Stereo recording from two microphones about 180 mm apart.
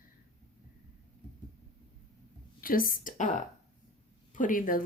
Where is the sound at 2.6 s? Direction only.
50° left (ahead or behind).